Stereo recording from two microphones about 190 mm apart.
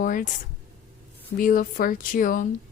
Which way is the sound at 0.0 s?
45° left (ahead or behind).